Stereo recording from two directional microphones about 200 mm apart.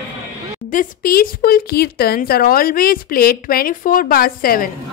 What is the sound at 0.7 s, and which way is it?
A woman's voice, 45° left (ahead or behind).